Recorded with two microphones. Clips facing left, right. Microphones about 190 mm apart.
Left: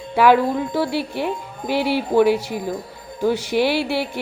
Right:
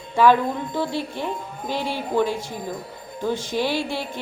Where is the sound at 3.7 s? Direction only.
70° left (ahead or behind).